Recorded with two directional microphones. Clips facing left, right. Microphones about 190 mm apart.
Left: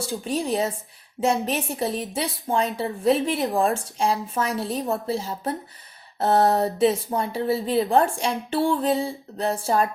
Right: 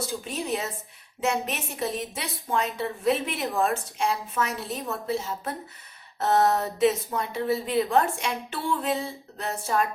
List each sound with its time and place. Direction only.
0.3 s speech: 30° left (ahead or behind)